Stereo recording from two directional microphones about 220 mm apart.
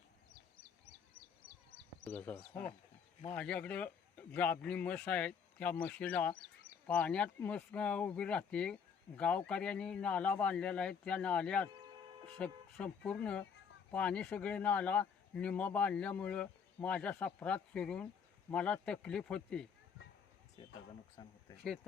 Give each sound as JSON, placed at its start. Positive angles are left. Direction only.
{"t": 2.0, "sound": "a man's voice", "side_deg": 5}
{"t": 21.2, "sound": "speech", "side_deg": 20}